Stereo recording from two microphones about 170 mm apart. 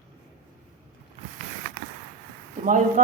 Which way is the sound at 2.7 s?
45° right (ahead or behind).